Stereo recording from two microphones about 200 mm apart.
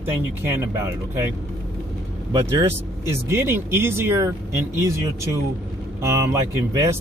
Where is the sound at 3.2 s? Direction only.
10° right (ahead or behind).